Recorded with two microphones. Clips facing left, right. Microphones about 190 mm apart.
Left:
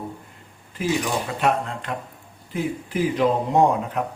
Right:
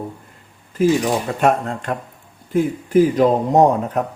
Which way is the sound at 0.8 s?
45° right (ahead or behind).